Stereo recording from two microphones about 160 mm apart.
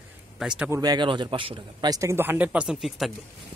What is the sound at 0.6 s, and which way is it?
A man's voice, 20° right (ahead or behind).